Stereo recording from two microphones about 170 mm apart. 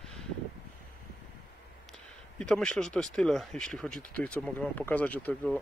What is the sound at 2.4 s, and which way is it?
Speech, 5° left (ahead or behind).